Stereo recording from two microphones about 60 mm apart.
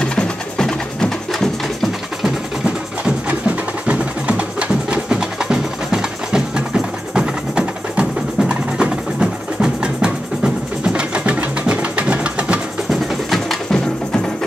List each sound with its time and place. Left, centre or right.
0.0 s music: centre
3.3 s music: right
13.3 s music: centre